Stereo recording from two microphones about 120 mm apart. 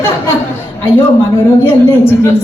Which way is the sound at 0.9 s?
20° left (ahead or behind).